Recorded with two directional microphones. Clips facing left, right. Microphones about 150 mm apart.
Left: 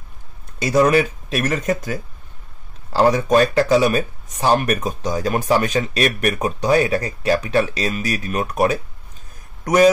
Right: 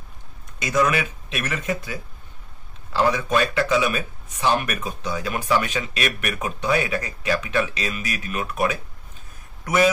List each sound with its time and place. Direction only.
0.6 s speech: 35° left (ahead or behind)